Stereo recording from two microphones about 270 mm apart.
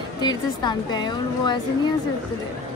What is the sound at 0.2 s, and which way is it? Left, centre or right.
A woman's voice, centre.